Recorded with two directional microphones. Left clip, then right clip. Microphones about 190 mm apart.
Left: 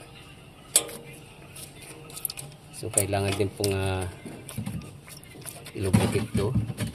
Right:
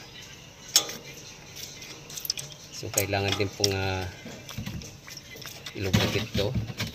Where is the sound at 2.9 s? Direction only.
10° left (ahead or behind).